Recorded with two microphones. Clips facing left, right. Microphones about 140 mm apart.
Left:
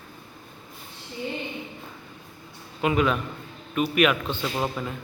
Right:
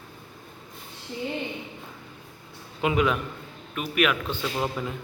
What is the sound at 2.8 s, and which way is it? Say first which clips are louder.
Speech: left 1 dB; 15° right (ahead or behind).